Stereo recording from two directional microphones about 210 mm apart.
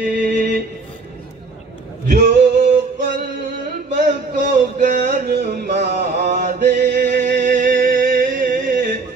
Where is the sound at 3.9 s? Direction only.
45° right (ahead or behind).